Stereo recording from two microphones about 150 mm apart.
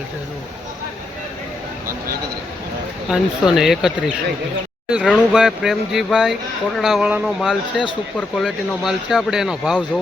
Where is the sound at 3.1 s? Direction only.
Centre (ahead or behind).